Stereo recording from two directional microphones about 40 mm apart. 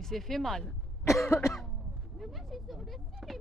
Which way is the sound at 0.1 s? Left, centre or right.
Centre.